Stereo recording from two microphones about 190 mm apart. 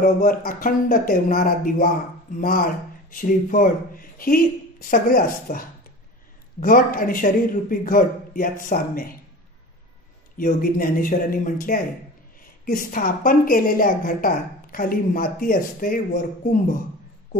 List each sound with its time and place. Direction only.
0.0 s a woman's voice: 45° left (ahead or behind)
10.3 s a woman's voice: 50° left (ahead or behind)